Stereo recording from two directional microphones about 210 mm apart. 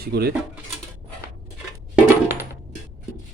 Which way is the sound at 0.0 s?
50° right (ahead or behind).